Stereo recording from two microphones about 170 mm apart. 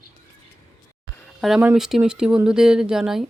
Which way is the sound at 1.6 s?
5° right (ahead or behind).